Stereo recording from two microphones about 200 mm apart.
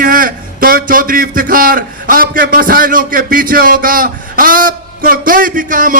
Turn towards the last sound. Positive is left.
turn(degrees=-40)  # may be behind; listen again after turning